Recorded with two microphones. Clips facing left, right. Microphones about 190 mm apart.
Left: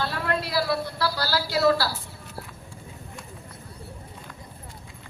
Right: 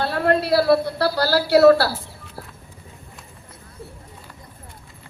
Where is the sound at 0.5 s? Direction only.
65° right (ahead or behind).